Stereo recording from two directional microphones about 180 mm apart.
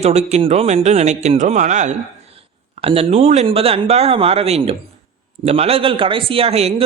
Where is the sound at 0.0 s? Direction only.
35° right (ahead or behind).